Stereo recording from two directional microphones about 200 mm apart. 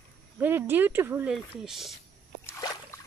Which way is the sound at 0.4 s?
10° right (ahead or behind).